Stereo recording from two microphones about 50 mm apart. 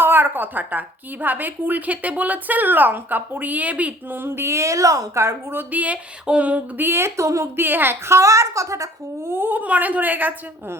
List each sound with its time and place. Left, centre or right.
0.0 s a woman's voice: right
4.1 s a woman's voice: right
5.7 s a woman's voice: right
6.2 s a sound: right
6.7 s a woman's voice: right
7.5 s a woman's voice: right
8.0 s speech: right
9.2 s a woman's voice: right